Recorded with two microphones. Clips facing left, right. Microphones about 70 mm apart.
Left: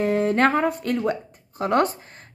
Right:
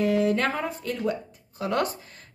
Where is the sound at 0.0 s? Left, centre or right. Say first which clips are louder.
Left 3 dB; left.